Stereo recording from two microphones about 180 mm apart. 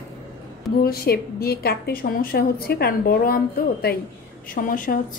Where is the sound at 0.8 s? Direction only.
55° left (ahead or behind).